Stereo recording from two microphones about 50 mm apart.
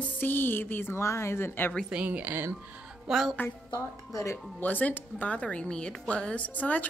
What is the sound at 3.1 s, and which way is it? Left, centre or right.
Speech, centre.